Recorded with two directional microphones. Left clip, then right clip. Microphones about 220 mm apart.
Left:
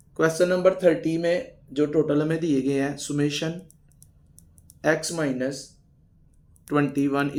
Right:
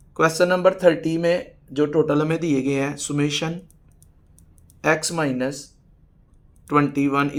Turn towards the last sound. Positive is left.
turn(degrees=-30)  # may be behind; listen again after turning